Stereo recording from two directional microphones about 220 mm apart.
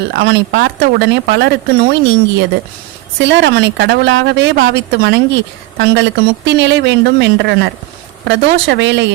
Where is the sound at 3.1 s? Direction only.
50° right (ahead or behind).